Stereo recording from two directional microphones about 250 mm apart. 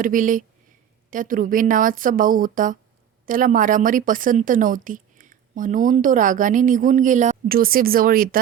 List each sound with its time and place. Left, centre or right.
0.0 s a woman's voice: right